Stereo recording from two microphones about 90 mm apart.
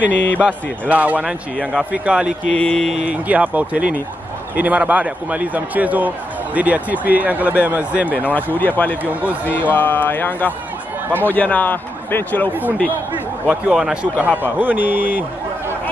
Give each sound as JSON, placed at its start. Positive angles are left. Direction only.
{"t": 0.1, "sound": "mantra", "side_deg": 15}
{"t": 0.5, "sound": "speech", "side_deg": -15}
{"t": 2.5, "sound": "mantra", "side_deg": 10}
{"t": 3.1, "sound": "speech", "side_deg": -15}
{"t": 8.2, "sound": "mantra", "side_deg": 20}
{"t": 8.5, "sound": "a man's voice", "side_deg": 20}
{"t": 9.1, "sound": "speech", "side_deg": -15}
{"t": 9.5, "sound": "a man's voice", "side_deg": 20}
{"t": 11.1, "sound": "speech", "side_deg": -20}
{"t": 11.3, "sound": "a man's voice", "side_deg": 15}
{"t": 13.5, "sound": "a man's voice", "side_deg": -10}